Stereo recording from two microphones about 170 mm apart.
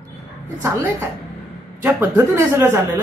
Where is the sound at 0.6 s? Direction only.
15° right (ahead or behind).